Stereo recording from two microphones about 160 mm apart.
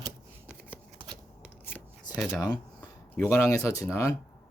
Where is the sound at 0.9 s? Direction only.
30° right (ahead or behind).